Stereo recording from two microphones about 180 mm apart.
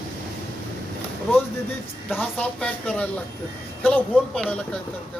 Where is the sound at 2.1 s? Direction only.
10° left (ahead or behind).